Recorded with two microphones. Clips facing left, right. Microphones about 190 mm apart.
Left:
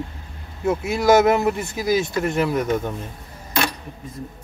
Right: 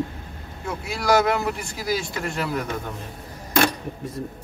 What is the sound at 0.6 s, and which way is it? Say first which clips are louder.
Speech: left 7 dB; 20° left (ahead or behind).